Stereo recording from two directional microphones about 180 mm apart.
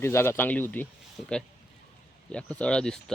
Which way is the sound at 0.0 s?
15° left (ahead or behind).